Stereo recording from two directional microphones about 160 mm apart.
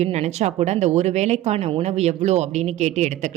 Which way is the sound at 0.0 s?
45° right (ahead or behind).